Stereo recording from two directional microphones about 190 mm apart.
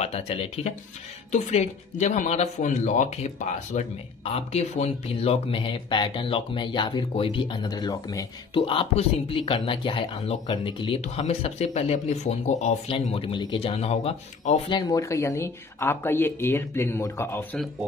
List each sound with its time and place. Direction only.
1.3 s speech: 35° left (ahead or behind)
14.8 s speech: 15° left (ahead or behind)